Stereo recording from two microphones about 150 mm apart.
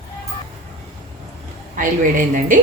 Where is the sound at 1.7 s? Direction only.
60° right (ahead or behind).